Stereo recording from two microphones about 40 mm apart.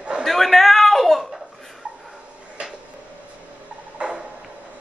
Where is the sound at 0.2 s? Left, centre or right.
Centre.